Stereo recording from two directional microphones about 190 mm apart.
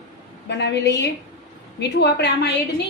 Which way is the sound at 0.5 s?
65° left (ahead or behind).